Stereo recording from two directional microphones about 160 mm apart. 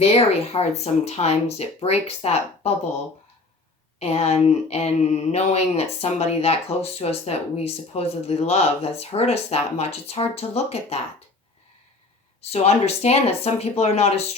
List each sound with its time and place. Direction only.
0.1 s speech: 40° left (ahead or behind)
4.0 s speech: 40° left (ahead or behind)
12.4 s speech: 40° left (ahead or behind)